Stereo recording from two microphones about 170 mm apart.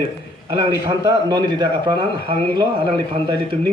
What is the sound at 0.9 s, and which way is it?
A man's voice, 25° right (ahead or behind).